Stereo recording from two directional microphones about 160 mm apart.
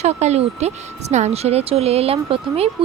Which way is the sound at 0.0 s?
45° right (ahead or behind).